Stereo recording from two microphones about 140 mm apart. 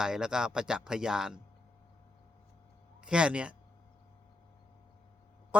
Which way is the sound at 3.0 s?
5° right (ahead or behind).